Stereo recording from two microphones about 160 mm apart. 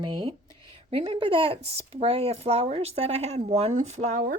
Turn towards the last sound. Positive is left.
turn(degrees=-50)  # may be behind; listen again after turning